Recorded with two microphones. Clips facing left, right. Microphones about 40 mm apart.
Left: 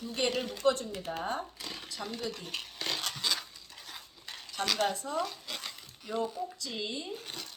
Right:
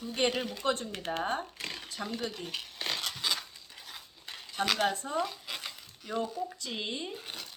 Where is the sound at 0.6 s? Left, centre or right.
Right.